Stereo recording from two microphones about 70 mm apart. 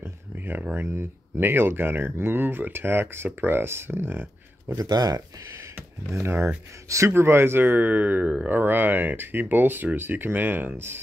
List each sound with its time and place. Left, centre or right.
0.8 s speech: right
4.7 s speech: right
6.1 s speech: right